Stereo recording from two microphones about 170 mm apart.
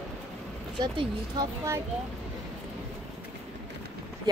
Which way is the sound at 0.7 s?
25° right (ahead or behind).